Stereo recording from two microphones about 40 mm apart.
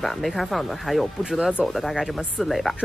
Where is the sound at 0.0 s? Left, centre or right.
Centre.